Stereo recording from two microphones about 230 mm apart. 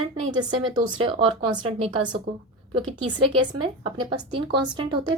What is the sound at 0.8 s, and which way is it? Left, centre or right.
Speech, right.